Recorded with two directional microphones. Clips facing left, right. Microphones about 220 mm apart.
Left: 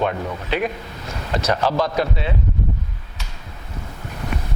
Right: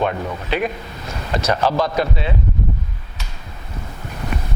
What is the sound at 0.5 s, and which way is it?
Speech, 15° right (ahead or behind).